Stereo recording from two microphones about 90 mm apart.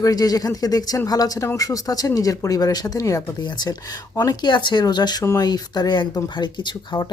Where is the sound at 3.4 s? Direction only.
50° left (ahead or behind).